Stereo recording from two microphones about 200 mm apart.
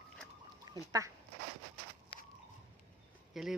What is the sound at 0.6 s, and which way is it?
Duck, 20° right (ahead or behind).